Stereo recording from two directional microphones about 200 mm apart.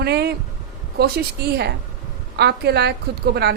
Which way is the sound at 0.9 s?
50° right (ahead or behind).